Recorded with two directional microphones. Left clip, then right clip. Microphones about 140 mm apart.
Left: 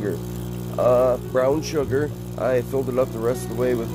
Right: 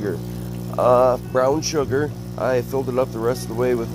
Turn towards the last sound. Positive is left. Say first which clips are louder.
# right 2 dB
turn(degrees=-25)  # may be behind; listen again after turning